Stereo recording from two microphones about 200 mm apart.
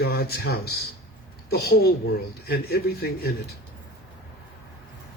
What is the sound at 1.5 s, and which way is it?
A man's voice, 50° left (ahead or behind).